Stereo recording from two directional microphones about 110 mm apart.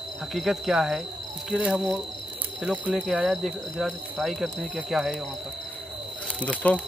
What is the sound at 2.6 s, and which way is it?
Cricket, 5° right (ahead or behind).